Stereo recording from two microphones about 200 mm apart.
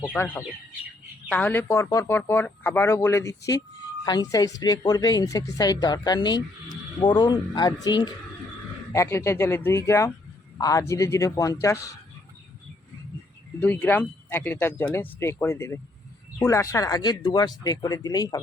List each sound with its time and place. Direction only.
0.0 s speech: 10° left (ahead or behind)
13.6 s speech: 10° left (ahead or behind)